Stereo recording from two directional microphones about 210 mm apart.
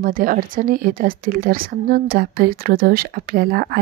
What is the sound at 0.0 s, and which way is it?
A woman's voice, 40° right (ahead or behind).